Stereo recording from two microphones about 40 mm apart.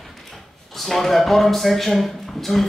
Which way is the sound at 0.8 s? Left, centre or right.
Centre.